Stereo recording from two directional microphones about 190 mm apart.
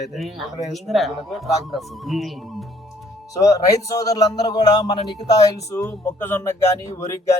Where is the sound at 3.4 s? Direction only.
15° left (ahead or behind).